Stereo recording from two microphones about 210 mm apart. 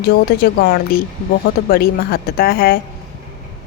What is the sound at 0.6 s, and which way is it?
A woman's voice, 45° left (ahead or behind).